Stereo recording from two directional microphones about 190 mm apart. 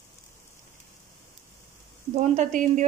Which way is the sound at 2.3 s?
40° right (ahead or behind).